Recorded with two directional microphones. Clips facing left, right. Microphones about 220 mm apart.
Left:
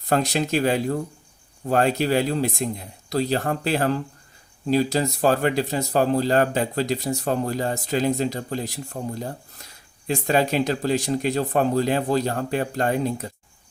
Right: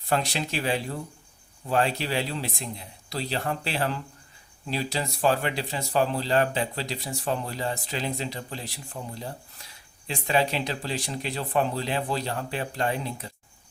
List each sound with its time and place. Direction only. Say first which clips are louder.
0.1 s speech: left 6 dB; 45° left (ahead or behind)